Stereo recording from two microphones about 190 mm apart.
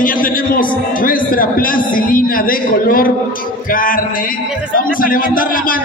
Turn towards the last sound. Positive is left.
turn(degrees=45)  # may be behind; listen again after turning